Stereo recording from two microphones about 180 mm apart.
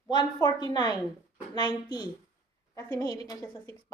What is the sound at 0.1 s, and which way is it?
A woman's voice, 25° left (ahead or behind).